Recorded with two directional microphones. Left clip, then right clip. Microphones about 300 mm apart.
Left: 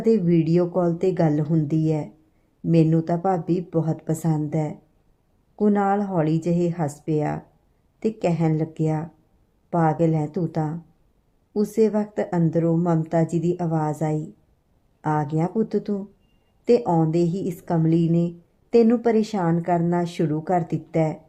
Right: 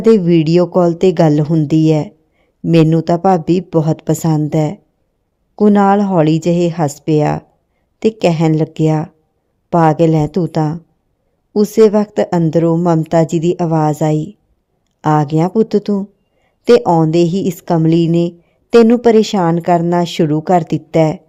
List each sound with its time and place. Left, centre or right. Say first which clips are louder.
0.0 s a woman's voice: right 10 dB; right